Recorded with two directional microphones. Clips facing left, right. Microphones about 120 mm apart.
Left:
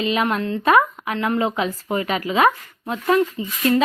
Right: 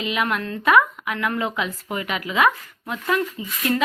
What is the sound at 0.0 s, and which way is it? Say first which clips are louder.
A woman's voice: left 4 dB; 35° left (ahead or behind).